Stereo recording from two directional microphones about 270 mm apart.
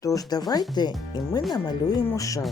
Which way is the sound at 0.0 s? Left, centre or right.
Centre.